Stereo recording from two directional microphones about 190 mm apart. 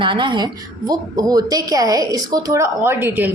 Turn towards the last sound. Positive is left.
turn(degrees=-10)  # may be behind; listen again after turning